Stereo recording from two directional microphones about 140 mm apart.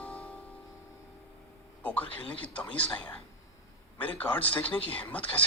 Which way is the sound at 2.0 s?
35° left (ahead or behind).